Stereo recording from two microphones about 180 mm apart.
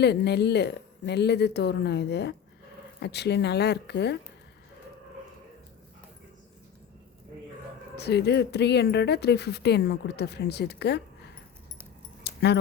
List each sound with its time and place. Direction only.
0.0 s speech: 70° left (ahead or behind)
7.9 s speech: 65° left (ahead or behind)
12.2 s keys jangling: 65° left (ahead or behind)